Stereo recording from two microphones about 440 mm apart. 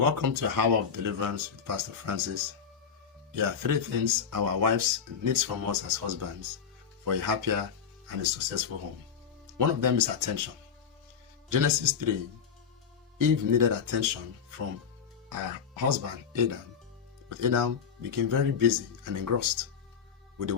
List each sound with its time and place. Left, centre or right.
0.0 s speech: right
11.4 s speech: right
13.1 s speech: right
15.3 s speech: right